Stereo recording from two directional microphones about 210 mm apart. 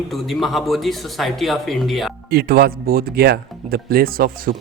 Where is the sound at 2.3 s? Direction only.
45° right (ahead or behind).